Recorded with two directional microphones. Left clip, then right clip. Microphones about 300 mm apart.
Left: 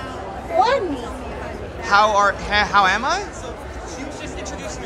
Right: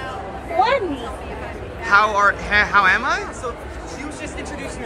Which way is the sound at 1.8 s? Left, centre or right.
Centre.